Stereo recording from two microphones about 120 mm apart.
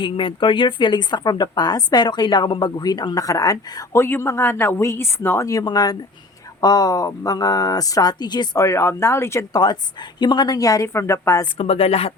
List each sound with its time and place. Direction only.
0.0 s a woman's voice: 45° left (ahead or behind)
8.6 s a woman's voice: 20° left (ahead or behind)
9.6 s speech: 35° left (ahead or behind)
11.5 s speech: 55° left (ahead or behind)